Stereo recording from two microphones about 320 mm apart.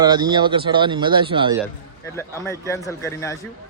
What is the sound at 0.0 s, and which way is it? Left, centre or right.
Speech, centre.